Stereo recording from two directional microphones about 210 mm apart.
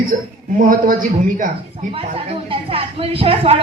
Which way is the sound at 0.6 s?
40° right (ahead or behind).